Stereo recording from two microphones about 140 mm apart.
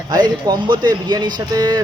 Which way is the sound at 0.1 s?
30° right (ahead or behind).